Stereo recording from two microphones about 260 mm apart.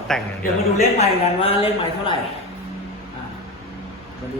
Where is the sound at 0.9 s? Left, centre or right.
Left.